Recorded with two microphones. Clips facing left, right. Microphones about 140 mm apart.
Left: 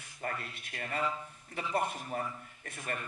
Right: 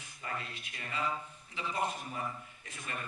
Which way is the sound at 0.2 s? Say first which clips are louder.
Left 2 dB; 55° left (ahead or behind).